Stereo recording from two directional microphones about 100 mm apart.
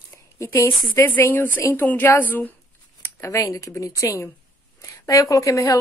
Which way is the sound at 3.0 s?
30° left (ahead or behind).